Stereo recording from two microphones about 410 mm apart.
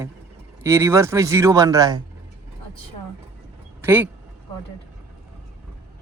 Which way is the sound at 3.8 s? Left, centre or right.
Centre.